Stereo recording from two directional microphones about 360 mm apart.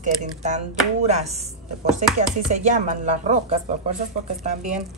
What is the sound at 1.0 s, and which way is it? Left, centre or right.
Speech, centre.